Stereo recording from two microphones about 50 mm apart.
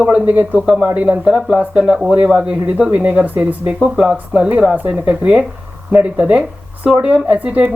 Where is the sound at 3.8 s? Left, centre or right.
Centre.